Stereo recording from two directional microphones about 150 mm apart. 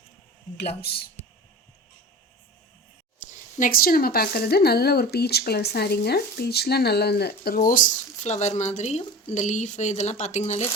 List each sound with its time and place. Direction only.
0.8 s speech: 90° left
3.2 s speech: 70° left (ahead or behind); by 10.7 s 45° left (ahead or behind)